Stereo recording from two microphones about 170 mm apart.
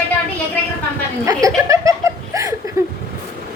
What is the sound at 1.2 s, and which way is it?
Speech, 20° right (ahead or behind).